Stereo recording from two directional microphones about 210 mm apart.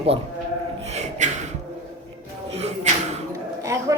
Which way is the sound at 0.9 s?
30° right (ahead or behind).